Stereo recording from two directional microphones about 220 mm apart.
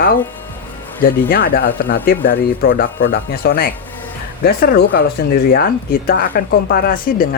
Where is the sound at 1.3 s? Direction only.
40° left (ahead or behind).